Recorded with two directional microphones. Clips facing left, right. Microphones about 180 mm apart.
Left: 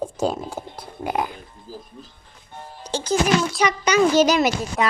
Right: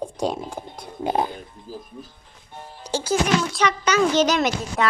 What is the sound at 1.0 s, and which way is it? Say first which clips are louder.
Speech: right 2 dB; 25° right (ahead or behind).